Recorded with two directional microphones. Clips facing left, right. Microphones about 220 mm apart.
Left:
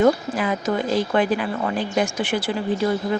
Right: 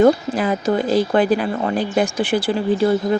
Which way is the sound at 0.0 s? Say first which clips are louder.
Right 4 dB; 40° right (ahead or behind).